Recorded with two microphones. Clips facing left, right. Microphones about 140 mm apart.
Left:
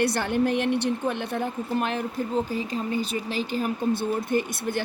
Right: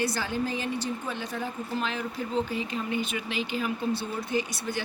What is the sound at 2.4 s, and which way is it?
Speech, 40° left (ahead or behind).